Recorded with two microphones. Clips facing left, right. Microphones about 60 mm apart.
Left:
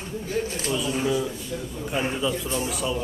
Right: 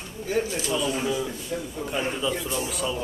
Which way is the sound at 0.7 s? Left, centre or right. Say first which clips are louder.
Left 1 dB; centre.